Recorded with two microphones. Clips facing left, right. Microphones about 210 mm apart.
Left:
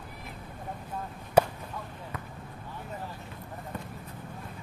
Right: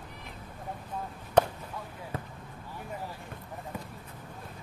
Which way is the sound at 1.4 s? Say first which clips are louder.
Left 1 dB; 10° left (ahead or behind).